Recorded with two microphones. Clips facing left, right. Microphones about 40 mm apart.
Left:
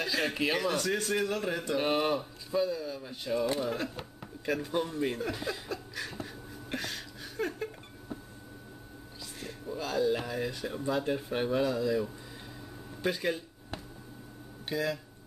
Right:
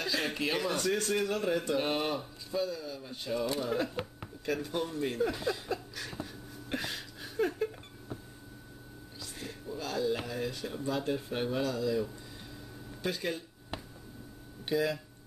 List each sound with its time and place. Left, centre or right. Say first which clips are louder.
0.0 s a man's voice: left 2 dB; centre
6.7 s a sound: right 1 dB; centre
9.4 s a man's voice: left 2 dB; centre
14.7 s speech: right 2 dB; centre